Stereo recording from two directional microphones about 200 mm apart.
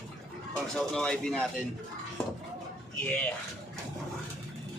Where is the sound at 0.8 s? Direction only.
5° left (ahead or behind).